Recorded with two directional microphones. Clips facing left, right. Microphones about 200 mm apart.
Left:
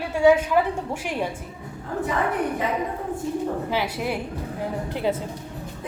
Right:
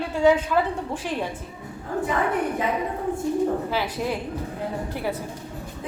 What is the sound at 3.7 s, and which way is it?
A woman's voice, 15° left (ahead or behind).